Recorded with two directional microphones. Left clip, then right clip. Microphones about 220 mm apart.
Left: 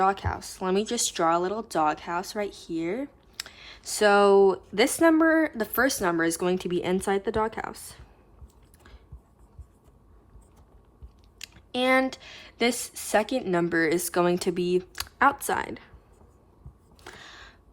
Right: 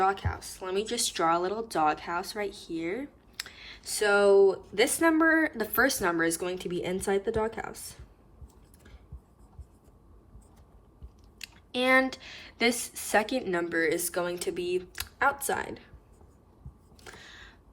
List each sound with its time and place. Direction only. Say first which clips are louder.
0.0 s speech: left 3 dB; 15° left (ahead or behind)
11.3 s speech: left 2 dB; 10° left (ahead or behind)
17.0 s a sound: left 3 dB; 15° left (ahead or behind)